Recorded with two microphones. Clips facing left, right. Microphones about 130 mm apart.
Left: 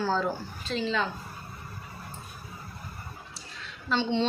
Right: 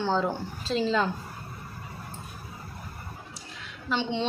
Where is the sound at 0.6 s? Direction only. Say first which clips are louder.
Right 3 dB; 35° right (ahead or behind).